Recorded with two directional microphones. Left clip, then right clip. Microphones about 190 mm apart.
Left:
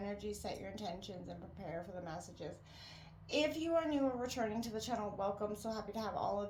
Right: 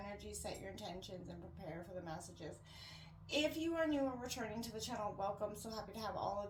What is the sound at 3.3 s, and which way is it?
A woman's voice, 40° left (ahead or behind).